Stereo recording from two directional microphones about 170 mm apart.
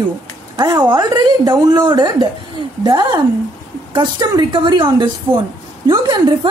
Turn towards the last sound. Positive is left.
turn(degrees=-25)  # may be behind; listen again after turning